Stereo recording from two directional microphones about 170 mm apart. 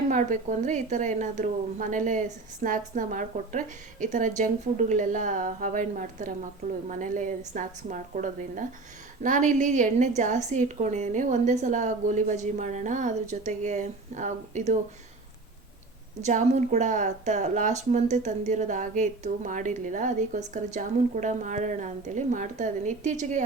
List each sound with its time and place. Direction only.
0.1 s a woman's voice: 45° right (ahead or behind)
16.2 s a woman's voice: 45° right (ahead or behind)